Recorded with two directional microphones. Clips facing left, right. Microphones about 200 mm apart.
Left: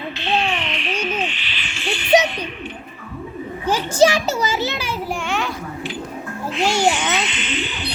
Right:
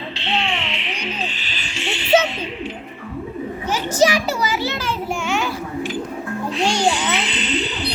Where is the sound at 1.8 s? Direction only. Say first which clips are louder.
Left 1 dB; 25° right (ahead or behind).